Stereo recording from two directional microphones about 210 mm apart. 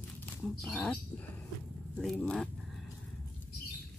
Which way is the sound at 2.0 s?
Centre (ahead or behind).